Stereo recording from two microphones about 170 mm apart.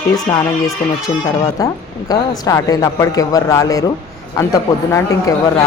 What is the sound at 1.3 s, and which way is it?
Speech, 20° left (ahead or behind).